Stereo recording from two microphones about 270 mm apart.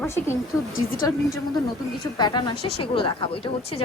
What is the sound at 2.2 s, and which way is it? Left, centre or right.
A woman's voice, centre.